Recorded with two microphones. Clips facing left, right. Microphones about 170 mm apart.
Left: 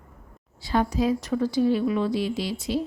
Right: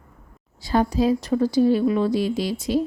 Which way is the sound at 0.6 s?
40° right (ahead or behind).